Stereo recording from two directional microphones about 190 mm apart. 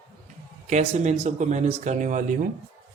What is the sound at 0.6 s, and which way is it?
Speech, 40° right (ahead or behind).